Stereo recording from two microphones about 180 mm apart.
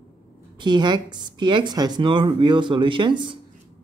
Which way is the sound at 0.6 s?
25° right (ahead or behind).